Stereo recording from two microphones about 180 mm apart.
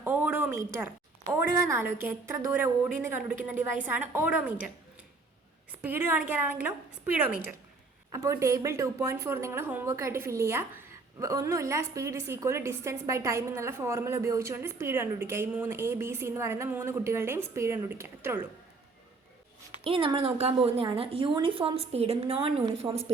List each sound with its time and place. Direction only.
0.0 s a sound: 10° right (ahead or behind)
1.6 s a woman's voice: 15° right (ahead or behind)
5.8 s a woman's voice: 10° right (ahead or behind)
19.8 s a woman's voice: 30° right (ahead or behind)